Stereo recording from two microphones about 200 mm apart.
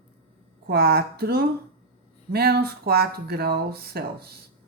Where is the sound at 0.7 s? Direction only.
50° right (ahead or behind).